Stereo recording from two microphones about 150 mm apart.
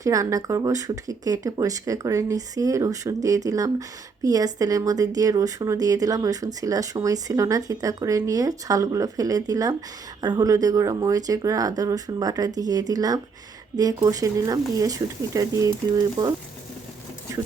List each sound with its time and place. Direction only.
0.0 s speech: 20° right (ahead or behind)